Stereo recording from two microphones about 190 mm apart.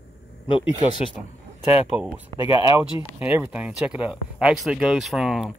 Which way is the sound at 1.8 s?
5° right (ahead or behind).